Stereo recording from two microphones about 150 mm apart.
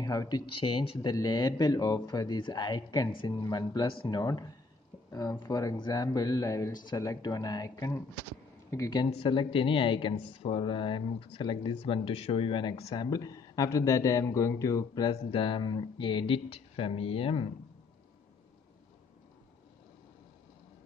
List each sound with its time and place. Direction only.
0.0 s speech: 25° left (ahead or behind)
9.2 s speech: 35° left (ahead or behind)
12.9 s speech: 25° left (ahead or behind)